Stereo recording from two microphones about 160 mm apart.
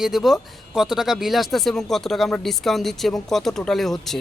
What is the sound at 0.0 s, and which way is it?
Speech, centre (ahead or behind).